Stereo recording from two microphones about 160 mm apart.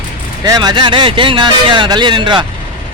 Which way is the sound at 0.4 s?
25° right (ahead or behind).